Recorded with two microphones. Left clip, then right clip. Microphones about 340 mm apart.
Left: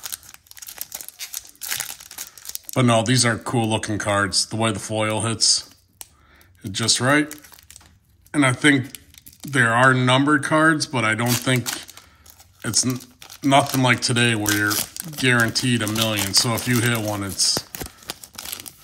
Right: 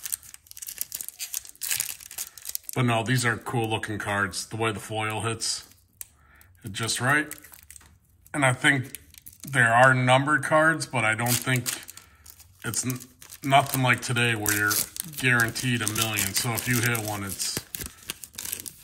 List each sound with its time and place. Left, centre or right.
2.6 s speech: centre
6.7 s speech: centre
8.3 s speech: centre
12.6 s speech: centre
18.0 s tearing: centre